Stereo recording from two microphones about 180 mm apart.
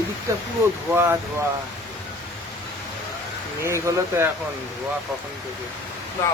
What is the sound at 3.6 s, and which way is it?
Speech, 15° right (ahead or behind).